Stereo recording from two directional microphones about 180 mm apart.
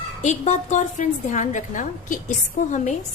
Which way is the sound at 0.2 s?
40° left (ahead or behind).